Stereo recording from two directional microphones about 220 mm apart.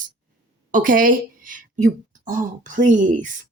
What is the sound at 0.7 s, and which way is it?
Speech, 35° right (ahead or behind).